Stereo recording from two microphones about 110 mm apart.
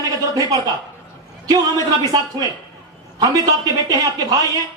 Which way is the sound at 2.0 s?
35° right (ahead or behind).